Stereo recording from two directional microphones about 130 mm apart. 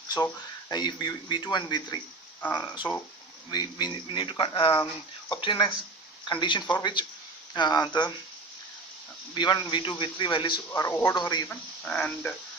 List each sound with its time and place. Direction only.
0.7 s speech: 35° left (ahead or behind)
9.3 s speech: 35° left (ahead or behind)
10.7 s speech: 20° left (ahead or behind)
11.1 s speech: 35° left (ahead or behind)
11.4 s speech: 5° left (ahead or behind)